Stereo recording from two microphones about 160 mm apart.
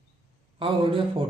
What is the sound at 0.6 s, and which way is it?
Speech, 35° right (ahead or behind).